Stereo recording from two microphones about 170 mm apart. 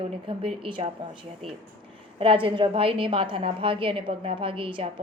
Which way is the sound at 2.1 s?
35° right (ahead or behind).